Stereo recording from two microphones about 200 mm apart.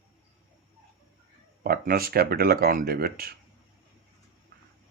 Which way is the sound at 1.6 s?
50° right (ahead or behind).